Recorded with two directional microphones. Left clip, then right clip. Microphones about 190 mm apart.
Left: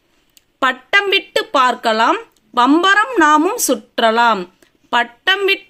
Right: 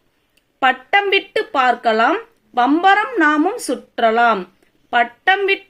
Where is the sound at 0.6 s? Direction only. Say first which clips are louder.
Even; 45° left (ahead or behind).